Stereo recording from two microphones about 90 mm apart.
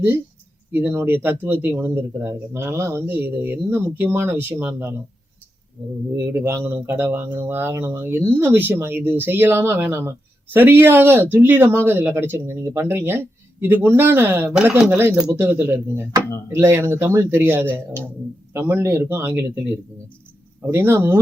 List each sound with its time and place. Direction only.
0.7 s speech: 20° right (ahead or behind)
6.3 s speech: 30° right (ahead or behind)
14.5 s speech: 15° right (ahead or behind)
20.7 s speech: 25° right (ahead or behind)